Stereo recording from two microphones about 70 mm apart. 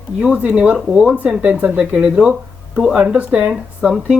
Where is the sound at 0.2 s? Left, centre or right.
Centre.